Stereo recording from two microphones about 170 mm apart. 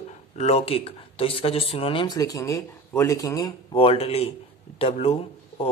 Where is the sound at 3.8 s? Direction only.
35° left (ahead or behind).